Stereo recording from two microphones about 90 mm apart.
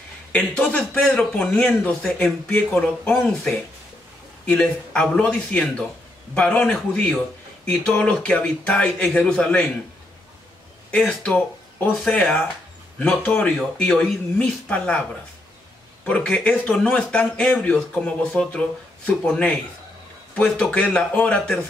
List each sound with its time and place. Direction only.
0.3 s speech: 15° left (ahead or behind)
11.2 s speech: 15° left (ahead or behind)
13.6 s speech: 5° left (ahead or behind)
14.7 s speech: 15° left (ahead or behind)
16.1 s speech: 15° left (ahead or behind)